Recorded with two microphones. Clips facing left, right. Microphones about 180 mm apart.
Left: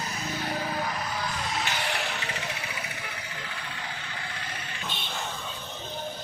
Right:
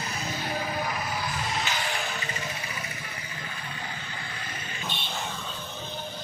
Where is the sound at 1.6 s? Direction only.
70° left (ahead or behind).